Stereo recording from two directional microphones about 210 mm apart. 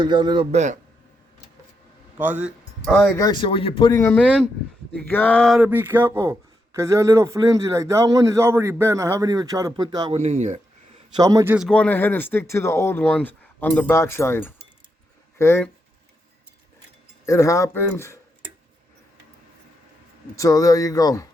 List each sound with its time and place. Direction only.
0.0 s speech: 20° right (ahead or behind)
0.5 s speech: 35° right (ahead or behind)
2.1 s a sound: 5° right (ahead or behind)
2.9 s a man's voice: 10° left (ahead or behind); by 10.6 s 35° right (ahead or behind)
11.2 s a man's voice: 15° right (ahead or behind)
11.5 s speech: centre (ahead or behind)
17.2 s speech: 15° left (ahead or behind)
20.3 s speech: 15° left (ahead or behind)